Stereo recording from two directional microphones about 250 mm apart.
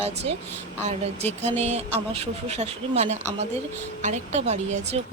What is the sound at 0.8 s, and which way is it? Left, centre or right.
Speech, right.